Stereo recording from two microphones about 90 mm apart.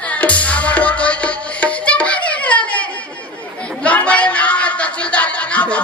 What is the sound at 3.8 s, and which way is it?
Music, 15° left (ahead or behind).